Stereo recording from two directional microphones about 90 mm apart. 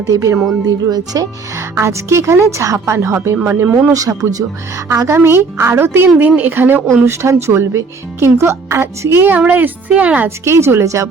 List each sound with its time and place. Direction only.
0.1 s speech: 35° right (ahead or behind)
1.5 s speech: 30° right (ahead or behind)
3.9 s speech: 40° right (ahead or behind); by 10.2 s 15° right (ahead or behind)
10.2 s speech: 30° right (ahead or behind)